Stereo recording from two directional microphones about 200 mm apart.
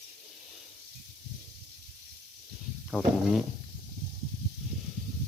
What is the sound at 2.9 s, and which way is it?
Speech, centre (ahead or behind).